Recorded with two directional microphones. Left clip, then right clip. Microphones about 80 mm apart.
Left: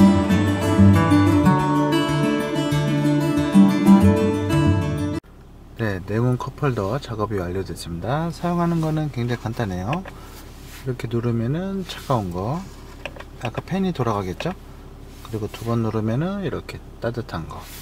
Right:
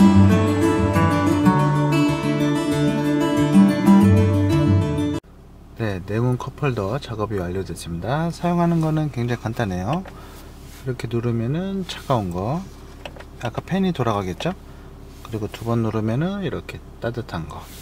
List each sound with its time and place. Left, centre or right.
0.0 s music: centre
5.8 s a sound: centre
7.0 s speech: centre
8.0 s speech: centre
8.3 s speech: right
9.1 s speech: right
11.0 s speech: centre
12.3 s speech: right
13.7 s speech: right; by 17.4 s centre